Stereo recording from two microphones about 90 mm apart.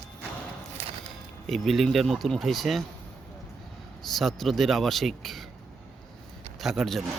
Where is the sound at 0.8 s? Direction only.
90° right.